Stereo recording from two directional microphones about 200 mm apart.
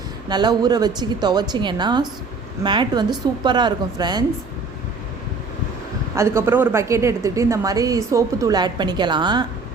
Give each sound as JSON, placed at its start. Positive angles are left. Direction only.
{"t": 0.3, "sound": "a woman's voice", "side_deg": -20}
{"t": 6.1, "sound": "a woman's voice", "side_deg": -10}